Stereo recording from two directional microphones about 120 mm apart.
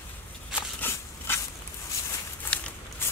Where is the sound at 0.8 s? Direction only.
20° left (ahead or behind).